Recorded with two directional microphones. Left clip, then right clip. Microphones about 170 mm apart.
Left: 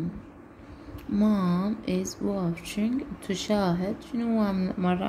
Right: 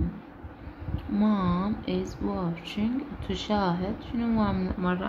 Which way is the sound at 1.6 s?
25° left (ahead or behind).